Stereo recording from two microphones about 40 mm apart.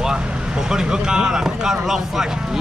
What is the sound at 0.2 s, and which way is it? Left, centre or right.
Speech, right.